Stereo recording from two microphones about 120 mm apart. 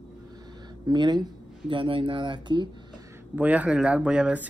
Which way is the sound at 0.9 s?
35° right (ahead or behind).